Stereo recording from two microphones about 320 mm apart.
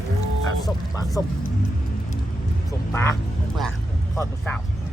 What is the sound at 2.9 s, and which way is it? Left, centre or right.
Speech, centre.